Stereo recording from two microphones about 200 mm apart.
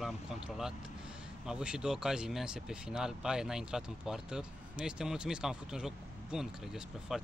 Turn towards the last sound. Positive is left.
turn(degrees=-5)  # may be behind; listen again after turning